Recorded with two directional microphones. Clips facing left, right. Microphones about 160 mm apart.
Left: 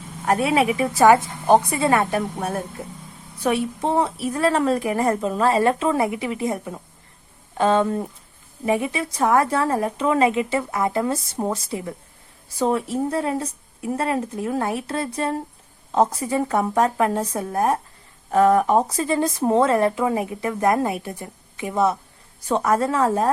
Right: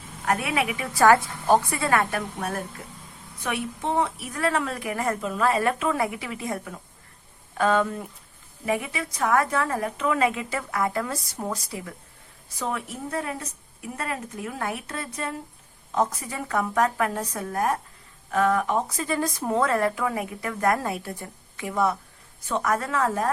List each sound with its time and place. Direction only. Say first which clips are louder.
0.3 s a woman's voice: left 6 dB; 30° left (ahead or behind)
22.4 s speech: left 6 dB; 30° left (ahead or behind)